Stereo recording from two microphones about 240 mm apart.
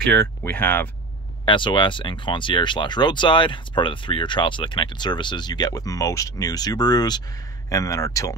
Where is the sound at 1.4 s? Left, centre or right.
Centre.